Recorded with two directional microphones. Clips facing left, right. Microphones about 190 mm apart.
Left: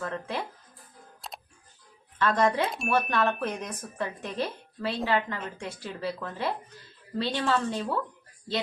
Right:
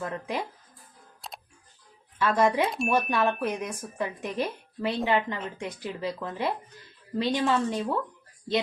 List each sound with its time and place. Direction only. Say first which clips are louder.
0.0 s speech: right 1 dB; 15° right (ahead or behind)
1.2 s music: even; centre (ahead or behind)
2.1 s speech: right 1 dB; 10° right (ahead or behind)